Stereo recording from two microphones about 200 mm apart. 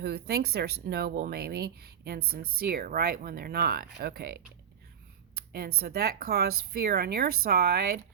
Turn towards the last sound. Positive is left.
turn(degrees=-50)  # may be behind; listen again after turning